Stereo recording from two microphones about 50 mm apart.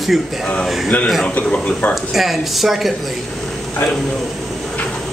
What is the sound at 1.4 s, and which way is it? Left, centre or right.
Speech, left.